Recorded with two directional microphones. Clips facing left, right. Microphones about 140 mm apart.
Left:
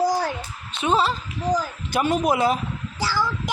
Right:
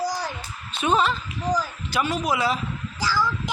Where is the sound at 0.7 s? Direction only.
25° left (ahead or behind).